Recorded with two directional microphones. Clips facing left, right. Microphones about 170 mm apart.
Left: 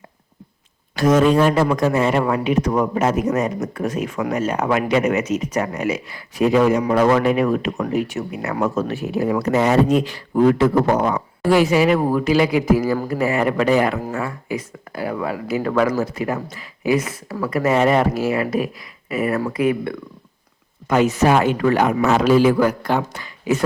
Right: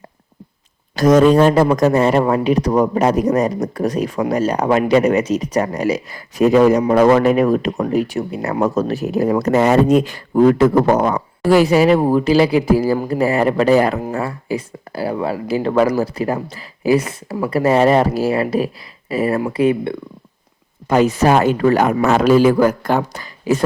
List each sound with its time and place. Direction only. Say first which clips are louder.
0.9 s speech: right 4 dB; 40° right (ahead or behind)